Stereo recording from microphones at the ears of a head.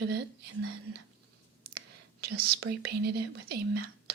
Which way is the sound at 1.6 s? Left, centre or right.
Right.